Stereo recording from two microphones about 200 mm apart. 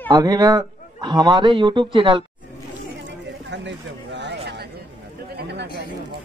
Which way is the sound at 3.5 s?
60° right (ahead or behind).